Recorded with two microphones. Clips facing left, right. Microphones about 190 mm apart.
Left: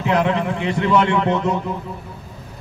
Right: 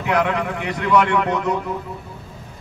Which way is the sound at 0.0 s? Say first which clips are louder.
Left 2 dB; 25° left (ahead or behind).